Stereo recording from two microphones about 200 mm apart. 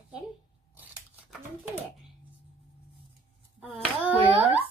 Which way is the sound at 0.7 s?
10° right (ahead or behind).